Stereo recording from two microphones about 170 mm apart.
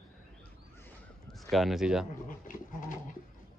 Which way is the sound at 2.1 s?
50° left (ahead or behind).